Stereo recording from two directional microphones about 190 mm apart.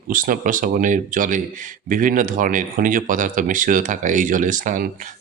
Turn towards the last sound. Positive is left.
turn(degrees=-45)  # may be behind; listen again after turning